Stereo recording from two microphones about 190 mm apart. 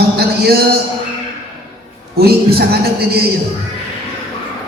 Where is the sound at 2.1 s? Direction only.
55° right (ahead or behind).